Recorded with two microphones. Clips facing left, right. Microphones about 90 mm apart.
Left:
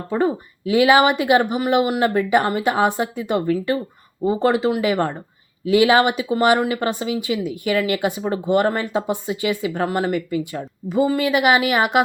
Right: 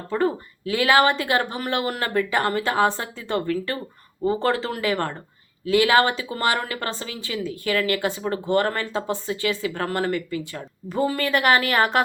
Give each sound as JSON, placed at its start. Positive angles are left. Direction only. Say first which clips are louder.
{"t": 0.1, "sound": "speech", "louder": "left 3 dB", "side_deg": 20}
{"t": 10.8, "sound": "speech", "louder": "left 5 dB", "side_deg": 5}